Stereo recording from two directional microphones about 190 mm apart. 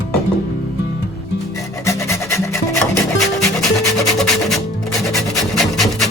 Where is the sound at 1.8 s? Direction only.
15° left (ahead or behind).